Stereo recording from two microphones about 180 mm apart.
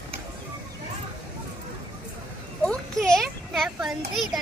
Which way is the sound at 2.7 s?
Centre (ahead or behind).